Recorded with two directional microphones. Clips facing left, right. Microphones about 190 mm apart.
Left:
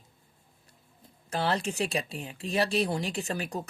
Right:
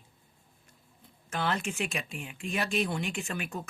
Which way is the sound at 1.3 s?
35° left (ahead or behind).